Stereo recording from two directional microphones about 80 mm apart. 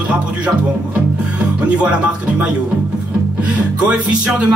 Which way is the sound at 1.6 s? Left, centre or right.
Centre.